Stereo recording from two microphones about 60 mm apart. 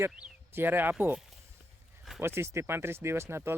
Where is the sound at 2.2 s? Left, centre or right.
Right.